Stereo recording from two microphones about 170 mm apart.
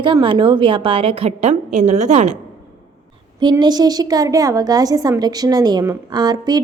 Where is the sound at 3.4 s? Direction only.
25° right (ahead or behind).